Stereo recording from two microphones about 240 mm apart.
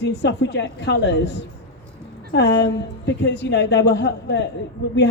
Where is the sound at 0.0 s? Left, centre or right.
Left.